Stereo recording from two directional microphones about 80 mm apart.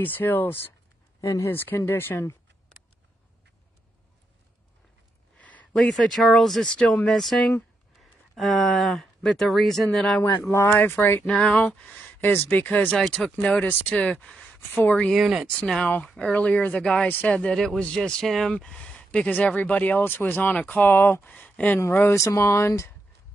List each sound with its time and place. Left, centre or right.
0.0 s speech: left
1.2 s speech: left
1.5 s speech: left
5.4 s a sound: centre
5.7 s speech: centre
10.2 s speech: left
11.2 s speech: centre
12.9 s speech: centre
14.2 s a sound: centre
14.7 s speech: left
15.1 s speech: centre
15.5 s speech: centre
22.1 s speech: left